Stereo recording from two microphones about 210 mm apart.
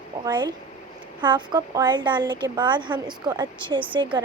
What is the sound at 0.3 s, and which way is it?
Speech, 20° right (ahead or behind).